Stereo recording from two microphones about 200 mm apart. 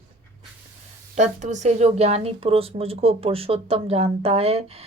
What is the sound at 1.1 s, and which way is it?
Speech, 35° right (ahead or behind).